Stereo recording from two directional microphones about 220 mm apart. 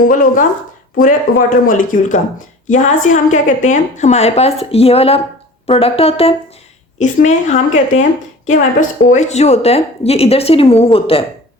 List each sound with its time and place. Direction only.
0.0 s a woman's voice: 35° left (ahead or behind)
9.0 s a woman's voice: 30° left (ahead or behind)